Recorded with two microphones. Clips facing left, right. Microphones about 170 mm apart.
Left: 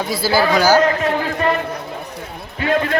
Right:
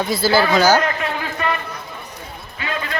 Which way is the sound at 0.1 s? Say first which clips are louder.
Left 1 dB; 10° left (ahead or behind).